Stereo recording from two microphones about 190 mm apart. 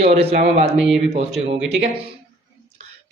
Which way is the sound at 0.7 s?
5° right (ahead or behind).